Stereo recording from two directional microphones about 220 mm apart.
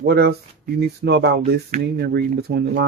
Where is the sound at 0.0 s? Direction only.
45° right (ahead or behind).